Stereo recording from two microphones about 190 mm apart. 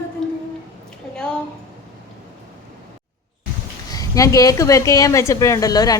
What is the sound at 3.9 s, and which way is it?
A woman's voice, 15° left (ahead or behind).